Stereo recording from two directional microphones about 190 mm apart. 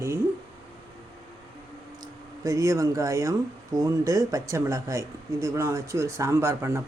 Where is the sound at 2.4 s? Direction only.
15° right (ahead or behind).